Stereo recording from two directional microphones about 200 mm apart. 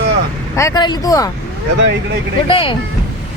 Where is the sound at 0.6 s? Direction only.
15° left (ahead or behind).